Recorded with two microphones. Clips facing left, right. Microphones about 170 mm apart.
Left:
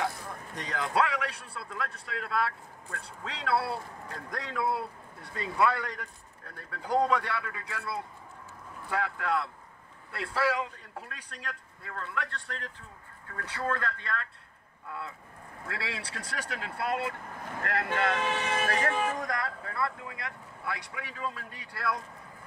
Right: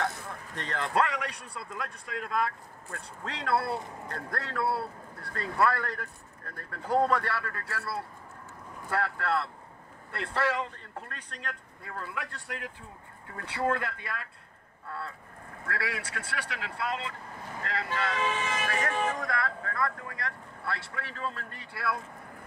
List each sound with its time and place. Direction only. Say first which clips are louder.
0.0 s a man's voice: even; 10° left (ahead or behind)
4.5 s speech: even; 15° left (ahead or behind)
5.4 s speech: even; centre (ahead or behind)
6.7 s speech: right 1 dB; 10° left (ahead or behind)
7.2 s speech: right 1 dB; 5° right (ahead or behind)
7.7 s speech: even; 15° left (ahead or behind)
11.9 s speech: left 2 dB; 5° right (ahead or behind)
14.9 s speech: right 1 dB; 15° left (ahead or behind)
15.7 s speech: right 3 dB; 25° left (ahead or behind); by 18.7 s 55° left (ahead or behind)
18.7 s speech: left 2 dB; 35° left (ahead or behind)
19.1 s speech: right 1 dB; 20° left (ahead or behind)
21.7 s speech: even; 5° right (ahead or behind)